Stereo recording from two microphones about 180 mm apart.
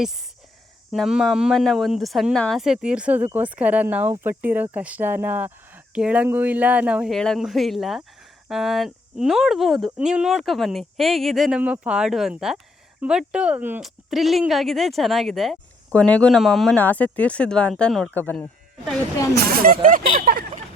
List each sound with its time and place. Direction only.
0.9 s speech: centre (ahead or behind)
19.3 s speech: 55° right (ahead or behind)